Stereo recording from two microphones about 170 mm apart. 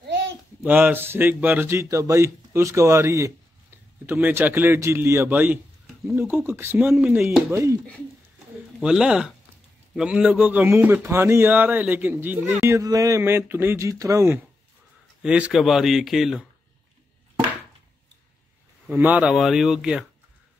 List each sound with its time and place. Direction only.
0.0 s a sound: 90° right
0.6 s speech: 10° right (ahead or behind)
8.7 s speech: 5° right (ahead or behind)
15.2 s speech: 5° right (ahead or behind)
18.9 s speech: 10° right (ahead or behind)